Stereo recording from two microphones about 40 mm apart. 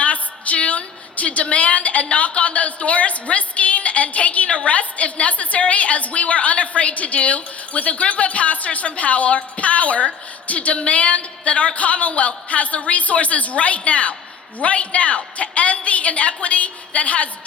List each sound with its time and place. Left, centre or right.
0.0 s a woman's voice: left